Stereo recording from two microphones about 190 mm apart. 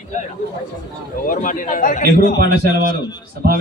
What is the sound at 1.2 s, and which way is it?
Speech, 45° left (ahead or behind).